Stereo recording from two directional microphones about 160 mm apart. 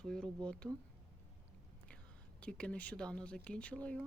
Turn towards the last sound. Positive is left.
turn(degrees=10)  # may be behind; listen again after turning